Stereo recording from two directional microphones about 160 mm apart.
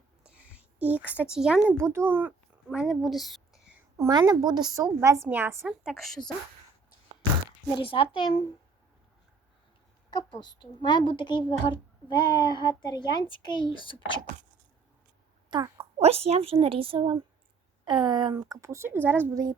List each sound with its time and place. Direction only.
0.2 s a sound: 10° right (ahead or behind)
1.8 s speech: 15° right (ahead or behind)
2.7 s a woman's voice: centre (ahead or behind)
3.9 s a woman's voice: 25° right (ahead or behind); by 6.3 s centre (ahead or behind)
7.7 s a child's voice: 35° left (ahead or behind)
10.1 s a woman's voice: 25° left (ahead or behind)
15.4 s a woman's voice: 25° right (ahead or behind)